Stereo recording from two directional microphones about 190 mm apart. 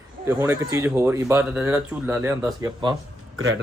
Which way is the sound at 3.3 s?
90° right.